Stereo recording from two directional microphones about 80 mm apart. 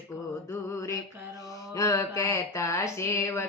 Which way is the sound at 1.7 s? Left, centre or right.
Left.